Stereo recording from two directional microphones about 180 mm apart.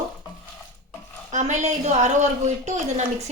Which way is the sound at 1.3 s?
40° right (ahead or behind).